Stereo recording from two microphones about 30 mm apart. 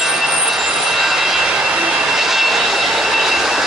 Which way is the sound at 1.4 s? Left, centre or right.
Right.